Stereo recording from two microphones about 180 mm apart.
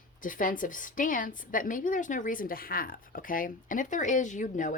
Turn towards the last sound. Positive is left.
turn(degrees=45)  # may be behind; listen again after turning